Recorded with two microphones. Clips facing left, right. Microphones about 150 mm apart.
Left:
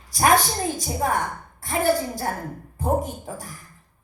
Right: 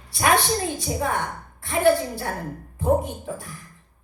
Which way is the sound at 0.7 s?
40° left (ahead or behind).